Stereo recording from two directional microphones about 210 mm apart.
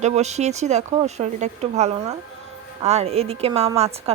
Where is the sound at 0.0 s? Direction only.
30° right (ahead or behind).